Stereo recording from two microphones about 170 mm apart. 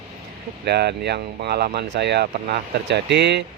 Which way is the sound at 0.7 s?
75° right (ahead or behind).